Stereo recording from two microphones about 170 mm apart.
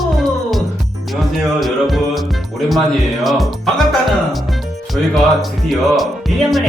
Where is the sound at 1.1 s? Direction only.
Centre (ahead or behind).